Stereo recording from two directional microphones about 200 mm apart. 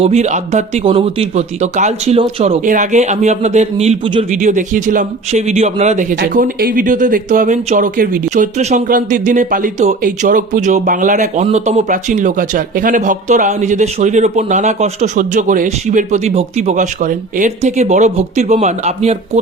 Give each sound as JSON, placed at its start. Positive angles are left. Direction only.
{"t": 0.0, "sound": "speech", "side_deg": -35}
{"t": 6.1, "sound": "speech", "side_deg": -50}